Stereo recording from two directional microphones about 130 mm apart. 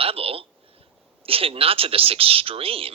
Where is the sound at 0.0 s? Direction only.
45° right (ahead or behind).